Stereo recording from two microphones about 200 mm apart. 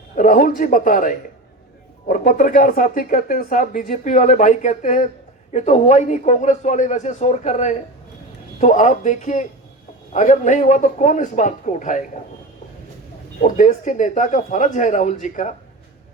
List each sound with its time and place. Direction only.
0.2 s a man's voice: 40° left (ahead or behind)
13.4 s speech: 40° left (ahead or behind)